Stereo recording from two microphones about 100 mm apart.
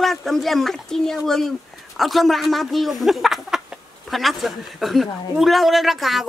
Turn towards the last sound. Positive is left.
turn(degrees=0)  # may be behind; listen again after turning